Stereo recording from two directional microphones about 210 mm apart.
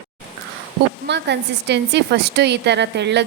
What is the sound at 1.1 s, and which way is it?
A woman's voice, 55° right (ahead or behind).